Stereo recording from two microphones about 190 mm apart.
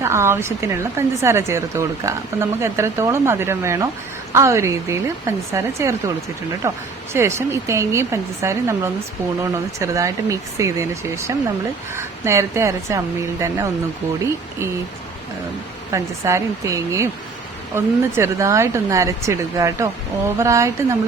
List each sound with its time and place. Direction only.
0.0 s speech: 15° right (ahead or behind)
15.9 s speech: 15° right (ahead or behind)